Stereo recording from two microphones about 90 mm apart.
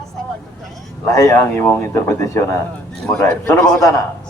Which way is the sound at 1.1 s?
35° left (ahead or behind).